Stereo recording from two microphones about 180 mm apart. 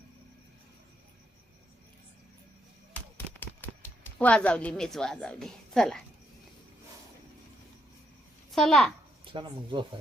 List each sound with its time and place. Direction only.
3.4 s speech: 10° left (ahead or behind)
8.5 s a child's voice: centre (ahead or behind)
9.3 s speech: 25° right (ahead or behind)